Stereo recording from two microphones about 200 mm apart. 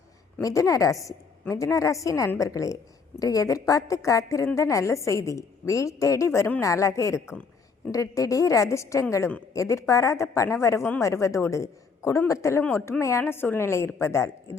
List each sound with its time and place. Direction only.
0.3 s a woman's voice: 15° left (ahead or behind)